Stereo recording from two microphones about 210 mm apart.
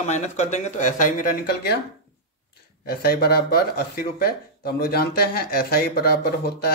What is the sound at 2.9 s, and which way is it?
Speech, 45° left (ahead or behind).